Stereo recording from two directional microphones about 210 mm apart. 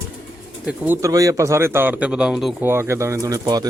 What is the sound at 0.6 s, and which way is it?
Speech, 10° right (ahead or behind).